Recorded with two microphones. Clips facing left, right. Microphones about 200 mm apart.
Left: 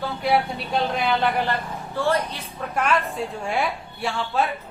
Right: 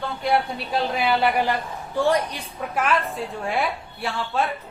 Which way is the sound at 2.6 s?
5° right (ahead or behind).